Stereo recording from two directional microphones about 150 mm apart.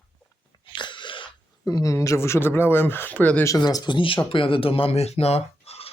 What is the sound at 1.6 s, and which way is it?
Speech, 20° left (ahead or behind).